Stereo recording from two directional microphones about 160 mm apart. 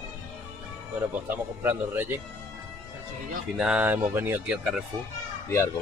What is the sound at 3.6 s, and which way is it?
Speech, 5° right (ahead or behind).